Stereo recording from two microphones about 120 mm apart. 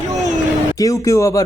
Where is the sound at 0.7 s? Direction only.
30° left (ahead or behind).